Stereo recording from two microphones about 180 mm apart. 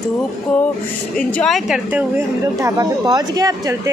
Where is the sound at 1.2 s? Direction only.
10° left (ahead or behind).